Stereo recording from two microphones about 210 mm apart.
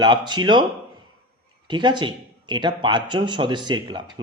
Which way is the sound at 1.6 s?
20° right (ahead or behind).